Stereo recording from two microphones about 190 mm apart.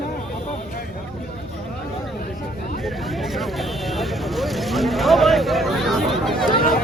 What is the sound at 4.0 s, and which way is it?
Speech, centre (ahead or behind).